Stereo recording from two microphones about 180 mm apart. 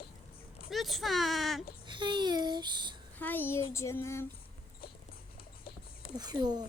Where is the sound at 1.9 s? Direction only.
25° right (ahead or behind).